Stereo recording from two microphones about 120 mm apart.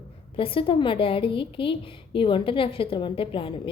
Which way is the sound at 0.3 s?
45° left (ahead or behind).